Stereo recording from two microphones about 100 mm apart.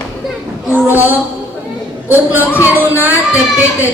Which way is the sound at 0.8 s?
20° right (ahead or behind).